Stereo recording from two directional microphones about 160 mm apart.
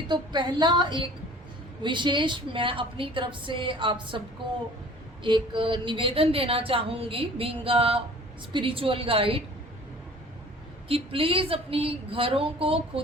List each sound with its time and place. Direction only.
0.1 s a woman's voice: 30° right (ahead or behind)
5.2 s a woman's voice: 30° right (ahead or behind)
10.8 s a woman's voice: 35° right (ahead or behind)